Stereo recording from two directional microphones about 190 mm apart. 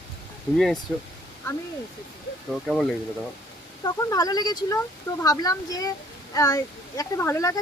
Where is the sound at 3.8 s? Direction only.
20° left (ahead or behind).